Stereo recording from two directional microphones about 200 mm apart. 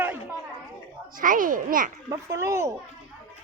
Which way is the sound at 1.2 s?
40° right (ahead or behind).